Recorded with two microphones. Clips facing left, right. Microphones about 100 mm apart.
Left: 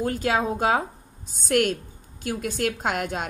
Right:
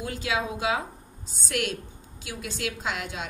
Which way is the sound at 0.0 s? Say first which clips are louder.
Left 6 dB; 45° left (ahead or behind).